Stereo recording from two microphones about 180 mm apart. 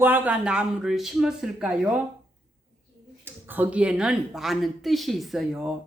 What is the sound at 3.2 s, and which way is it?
Speech, 10° right (ahead or behind).